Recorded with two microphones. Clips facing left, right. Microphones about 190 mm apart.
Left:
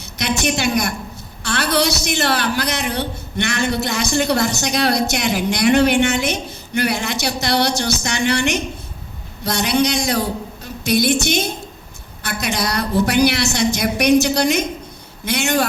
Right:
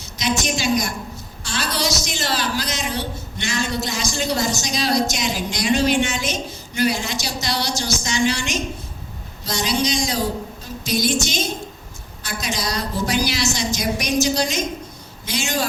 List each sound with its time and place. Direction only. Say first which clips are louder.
0.2 s a woman's voice: left 3 dB; 60° left (ahead or behind)